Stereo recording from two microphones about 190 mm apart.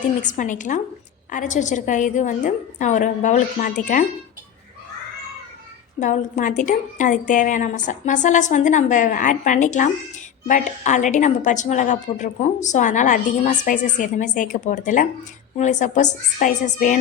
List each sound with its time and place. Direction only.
0.2 s a woman's voice: 40° left (ahead or behind)
6.0 s a woman's voice: 40° left (ahead or behind)